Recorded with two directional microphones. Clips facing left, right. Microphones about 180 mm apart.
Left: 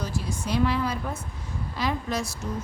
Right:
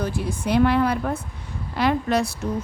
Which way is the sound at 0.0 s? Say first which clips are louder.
Right 5 dB; 60° right (ahead or behind).